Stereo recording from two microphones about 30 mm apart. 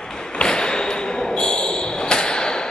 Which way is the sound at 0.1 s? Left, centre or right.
Left.